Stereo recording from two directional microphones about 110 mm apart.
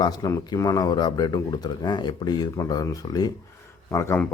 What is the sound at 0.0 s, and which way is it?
Speech, 35° left (ahead or behind).